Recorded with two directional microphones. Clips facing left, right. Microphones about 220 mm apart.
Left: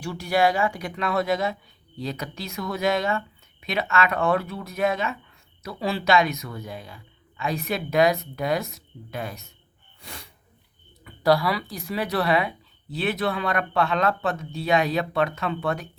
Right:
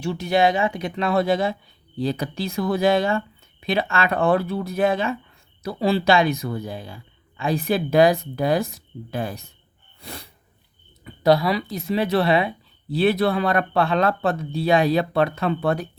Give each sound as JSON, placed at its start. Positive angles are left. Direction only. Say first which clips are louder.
{"t": 0.0, "sound": "speech", "louder": "right 3 dB", "side_deg": -25}
{"t": 10.0, "sound": "sneeze", "louder": "right 5 dB", "side_deg": -35}
{"t": 11.0, "sound": "speech", "louder": "right 3 dB", "side_deg": -20}